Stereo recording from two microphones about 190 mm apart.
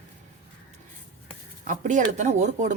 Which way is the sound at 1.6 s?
40° right (ahead or behind).